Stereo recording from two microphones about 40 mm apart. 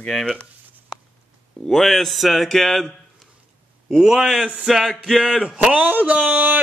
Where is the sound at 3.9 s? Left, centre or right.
Centre.